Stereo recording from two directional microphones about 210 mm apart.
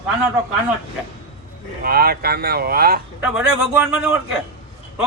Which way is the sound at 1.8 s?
45° right (ahead or behind).